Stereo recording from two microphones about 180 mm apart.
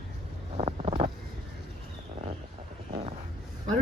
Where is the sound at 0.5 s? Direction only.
30° right (ahead or behind).